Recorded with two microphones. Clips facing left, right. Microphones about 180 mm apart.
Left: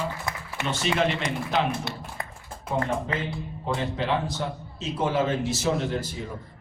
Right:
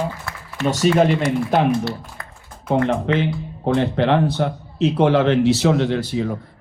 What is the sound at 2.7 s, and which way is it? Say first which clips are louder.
Speech: right 9 dB; 75° right (ahead or behind).